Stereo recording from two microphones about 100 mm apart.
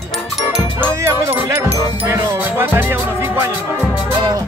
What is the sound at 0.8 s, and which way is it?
Speech, 25° right (ahead or behind).